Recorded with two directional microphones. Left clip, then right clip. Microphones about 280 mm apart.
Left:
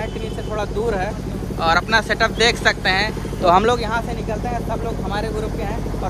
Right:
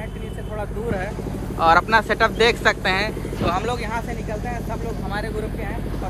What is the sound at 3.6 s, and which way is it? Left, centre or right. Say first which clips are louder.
Speech: left 7 dB; centre.